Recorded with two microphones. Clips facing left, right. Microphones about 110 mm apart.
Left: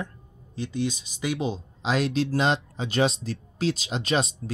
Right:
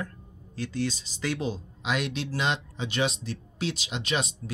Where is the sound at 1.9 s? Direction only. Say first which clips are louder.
Left 7 dB; 35° left (ahead or behind).